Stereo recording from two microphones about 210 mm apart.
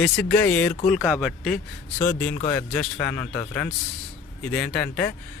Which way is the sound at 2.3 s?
20° left (ahead or behind).